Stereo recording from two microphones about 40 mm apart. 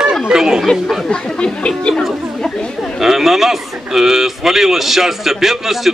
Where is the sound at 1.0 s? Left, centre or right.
Left.